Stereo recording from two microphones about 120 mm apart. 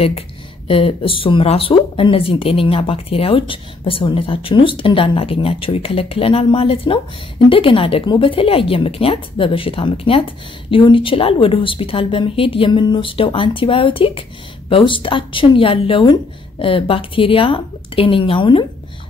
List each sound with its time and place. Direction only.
0.7 s speech: 50° left (ahead or behind)